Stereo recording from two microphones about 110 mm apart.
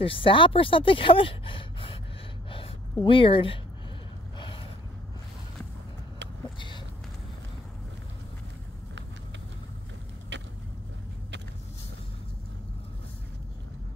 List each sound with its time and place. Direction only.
0.0 s speech: 55° left (ahead or behind)
3.1 s speech: 50° left (ahead or behind)
4.4 s gasp: 55° left (ahead or behind)